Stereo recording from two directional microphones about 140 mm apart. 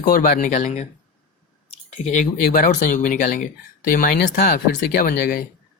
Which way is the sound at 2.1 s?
70° left (ahead or behind).